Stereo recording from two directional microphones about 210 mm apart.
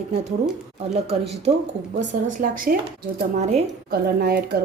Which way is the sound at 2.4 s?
40° right (ahead or behind).